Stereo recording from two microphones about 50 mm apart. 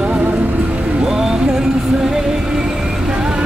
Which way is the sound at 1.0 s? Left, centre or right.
Centre.